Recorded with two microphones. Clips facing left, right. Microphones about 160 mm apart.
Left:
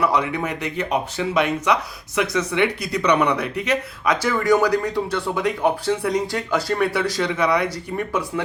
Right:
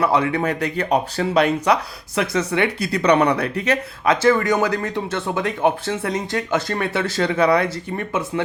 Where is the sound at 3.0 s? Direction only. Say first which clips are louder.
Right 3 dB; 35° right (ahead or behind).